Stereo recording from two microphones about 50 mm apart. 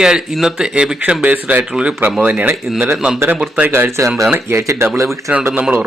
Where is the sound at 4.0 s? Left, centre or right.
Right.